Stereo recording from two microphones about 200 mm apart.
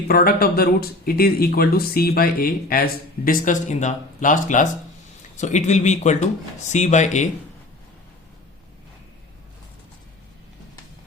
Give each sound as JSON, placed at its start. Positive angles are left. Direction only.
{"t": 0.1, "sound": "speech", "side_deg": 50}